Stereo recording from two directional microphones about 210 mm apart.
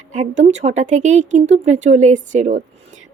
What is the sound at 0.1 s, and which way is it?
Speech, 35° right (ahead or behind).